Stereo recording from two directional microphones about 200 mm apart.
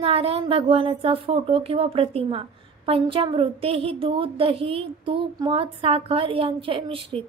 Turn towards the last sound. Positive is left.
turn(degrees=-25)  # may be behind; listen again after turning